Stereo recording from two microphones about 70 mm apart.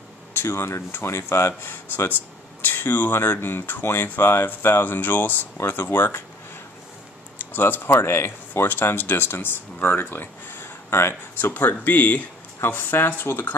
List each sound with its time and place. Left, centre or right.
0.3 s speech: left
7.3 s speech: left
12.5 s speech: left